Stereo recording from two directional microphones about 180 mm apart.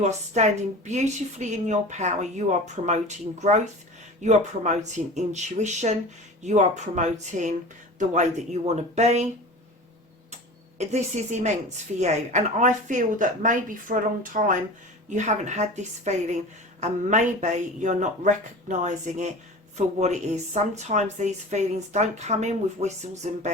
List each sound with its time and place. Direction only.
0.0 s a woman's voice: 40° right (ahead or behind)
10.8 s a woman's voice: 40° right (ahead or behind)